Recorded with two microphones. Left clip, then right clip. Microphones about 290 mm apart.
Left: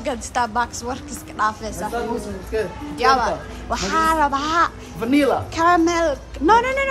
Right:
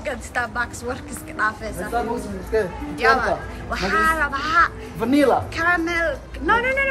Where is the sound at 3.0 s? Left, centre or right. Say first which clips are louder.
Left 1 dB; centre.